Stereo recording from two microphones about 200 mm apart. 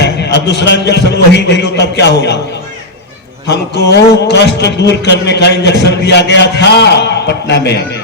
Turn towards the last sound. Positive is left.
turn(degrees=55)  # may be behind; listen again after turning